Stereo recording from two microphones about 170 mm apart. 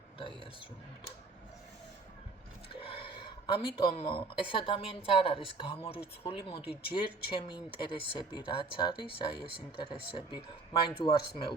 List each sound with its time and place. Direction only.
2.8 s speech: 30° left (ahead or behind)